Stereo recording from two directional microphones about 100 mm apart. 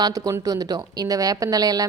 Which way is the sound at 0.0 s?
40° right (ahead or behind).